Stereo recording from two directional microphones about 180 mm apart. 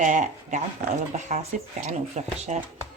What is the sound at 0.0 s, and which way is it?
Speech, 45° right (ahead or behind).